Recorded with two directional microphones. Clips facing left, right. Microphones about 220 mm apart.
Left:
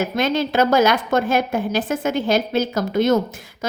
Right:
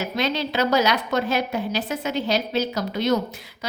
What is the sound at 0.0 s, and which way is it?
A woman's voice, 50° left (ahead or behind).